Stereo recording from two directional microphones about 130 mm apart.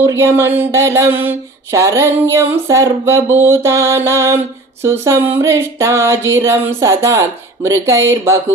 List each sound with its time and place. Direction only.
0.0 s mantra: 20° right (ahead or behind)